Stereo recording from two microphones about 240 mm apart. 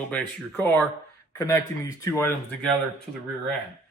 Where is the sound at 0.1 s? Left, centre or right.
Centre.